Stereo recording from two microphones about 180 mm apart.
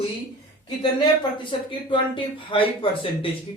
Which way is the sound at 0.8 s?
25° left (ahead or behind).